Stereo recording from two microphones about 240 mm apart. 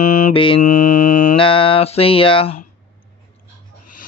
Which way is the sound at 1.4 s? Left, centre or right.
Left.